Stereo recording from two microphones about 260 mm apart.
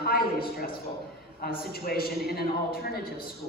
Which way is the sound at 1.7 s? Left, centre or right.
Left.